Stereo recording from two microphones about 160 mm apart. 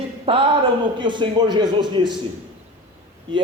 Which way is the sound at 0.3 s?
35° right (ahead or behind).